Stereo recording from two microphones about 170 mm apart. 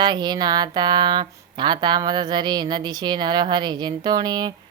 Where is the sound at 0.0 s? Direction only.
25° right (ahead or behind).